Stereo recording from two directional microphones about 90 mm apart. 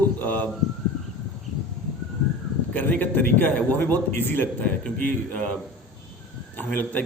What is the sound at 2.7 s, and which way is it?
A man's voice, 15° left (ahead or behind).